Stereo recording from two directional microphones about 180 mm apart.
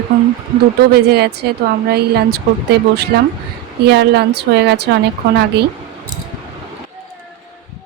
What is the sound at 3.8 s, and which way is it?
A woman's voice, 65° right (ahead or behind).